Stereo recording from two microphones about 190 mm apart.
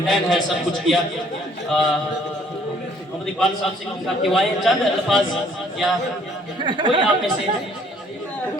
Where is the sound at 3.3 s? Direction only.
Centre (ahead or behind).